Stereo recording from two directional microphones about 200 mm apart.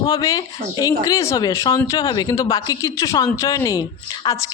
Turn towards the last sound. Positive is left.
turn(degrees=15)  # may be behind; listen again after turning